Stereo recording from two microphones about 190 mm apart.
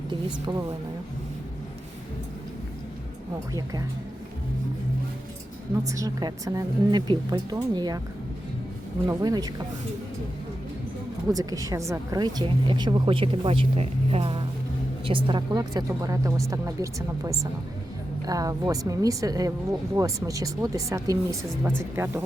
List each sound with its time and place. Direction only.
0.5 s speech: 15° right (ahead or behind)
3.5 s speech: 20° right (ahead or behind)
5.9 s speech: 20° right (ahead or behind)
9.0 s speech: 20° right (ahead or behind)
11.3 s speech: 20° right (ahead or behind)